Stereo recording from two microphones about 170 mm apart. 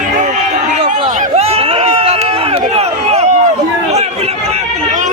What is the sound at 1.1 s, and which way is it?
Run, 40° right (ahead or behind).